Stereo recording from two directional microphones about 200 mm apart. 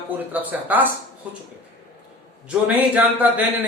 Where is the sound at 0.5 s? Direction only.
5° right (ahead or behind).